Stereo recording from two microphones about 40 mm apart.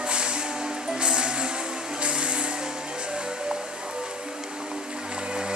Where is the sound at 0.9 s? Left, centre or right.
Right.